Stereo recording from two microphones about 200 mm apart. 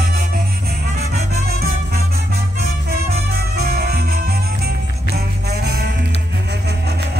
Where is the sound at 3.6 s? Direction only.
50° right (ahead or behind).